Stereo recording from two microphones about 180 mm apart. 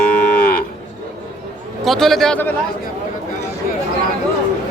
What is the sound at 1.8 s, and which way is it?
Speech, centre (ahead or behind).